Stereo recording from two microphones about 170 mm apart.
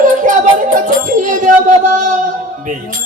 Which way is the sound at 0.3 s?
50° right (ahead or behind).